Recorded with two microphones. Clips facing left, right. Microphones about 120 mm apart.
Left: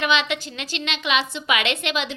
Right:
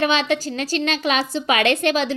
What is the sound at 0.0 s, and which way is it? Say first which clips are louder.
A woman's voice: right 3 dB; 35° right (ahead or behind).